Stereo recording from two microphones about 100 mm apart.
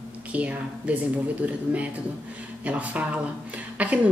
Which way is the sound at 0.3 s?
15° right (ahead or behind).